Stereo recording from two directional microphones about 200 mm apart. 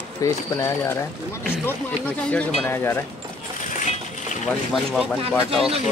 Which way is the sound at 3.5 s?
40° left (ahead or behind).